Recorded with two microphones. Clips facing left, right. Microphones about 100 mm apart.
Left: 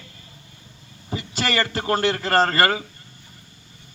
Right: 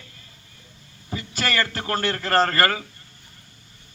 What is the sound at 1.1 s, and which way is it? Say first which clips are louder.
Speech: left 2 dB; 20° left (ahead or behind).